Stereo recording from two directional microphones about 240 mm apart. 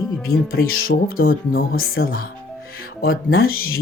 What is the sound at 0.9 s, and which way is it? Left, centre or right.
Speech, left.